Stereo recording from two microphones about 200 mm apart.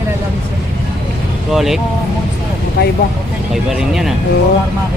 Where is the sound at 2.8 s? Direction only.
55° left (ahead or behind).